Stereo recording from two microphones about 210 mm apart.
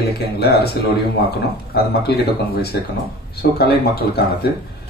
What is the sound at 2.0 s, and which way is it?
Speech, 50° left (ahead or behind).